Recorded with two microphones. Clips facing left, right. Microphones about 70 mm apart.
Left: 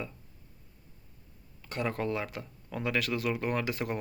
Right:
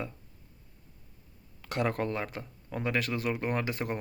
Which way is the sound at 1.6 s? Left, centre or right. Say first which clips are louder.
Right 3 dB; right.